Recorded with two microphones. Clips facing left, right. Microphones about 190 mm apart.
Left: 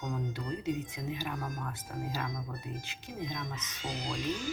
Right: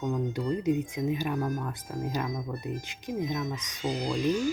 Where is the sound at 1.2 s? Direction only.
25° right (ahead or behind).